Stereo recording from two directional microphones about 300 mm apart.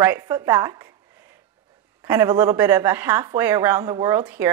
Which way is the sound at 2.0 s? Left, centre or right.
Centre.